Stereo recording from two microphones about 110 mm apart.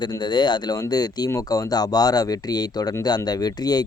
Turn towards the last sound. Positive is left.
turn(degrees=35)  # may be behind; listen again after turning